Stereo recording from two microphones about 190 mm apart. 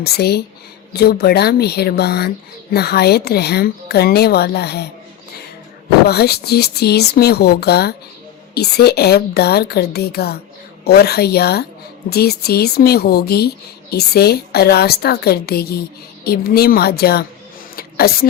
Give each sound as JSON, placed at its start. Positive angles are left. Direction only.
{"t": 0.0, "sound": "speech", "side_deg": 55}
{"t": 6.1, "sound": "speech", "side_deg": 55}
{"t": 17.7, "sound": "a sound", "side_deg": 55}